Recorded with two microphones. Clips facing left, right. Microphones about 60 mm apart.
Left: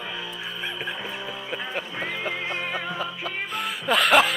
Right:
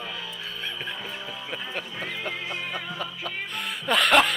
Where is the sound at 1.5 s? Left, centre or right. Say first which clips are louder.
Left 3 dB; centre.